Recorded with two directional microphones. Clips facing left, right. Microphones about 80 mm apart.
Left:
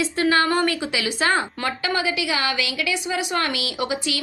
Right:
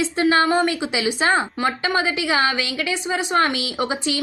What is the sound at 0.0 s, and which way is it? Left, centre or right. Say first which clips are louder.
Speech: right 2 dB; right.